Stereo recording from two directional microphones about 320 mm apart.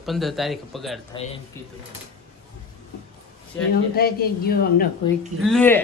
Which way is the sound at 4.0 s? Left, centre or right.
Left.